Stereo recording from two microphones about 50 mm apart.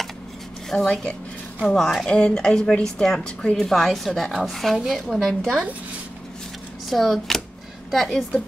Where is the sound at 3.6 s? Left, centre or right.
Centre.